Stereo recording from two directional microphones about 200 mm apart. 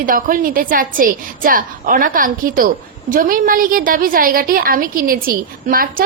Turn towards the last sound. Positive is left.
turn(degrees=-45)  # may be behind; listen again after turning